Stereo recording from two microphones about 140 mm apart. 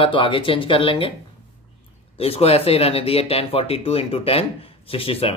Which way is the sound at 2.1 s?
45° left (ahead or behind).